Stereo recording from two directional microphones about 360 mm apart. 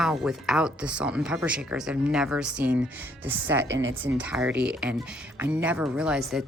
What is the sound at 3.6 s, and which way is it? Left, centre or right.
Speech, right.